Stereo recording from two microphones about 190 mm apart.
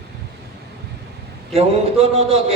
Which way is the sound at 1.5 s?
30° right (ahead or behind).